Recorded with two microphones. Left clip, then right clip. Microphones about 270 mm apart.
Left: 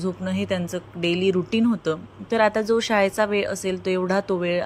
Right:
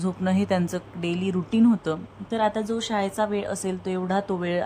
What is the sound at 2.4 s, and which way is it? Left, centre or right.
A woman's voice, centre.